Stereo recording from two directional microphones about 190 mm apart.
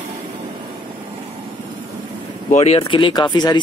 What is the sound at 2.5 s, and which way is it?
Speech, 35° left (ahead or behind).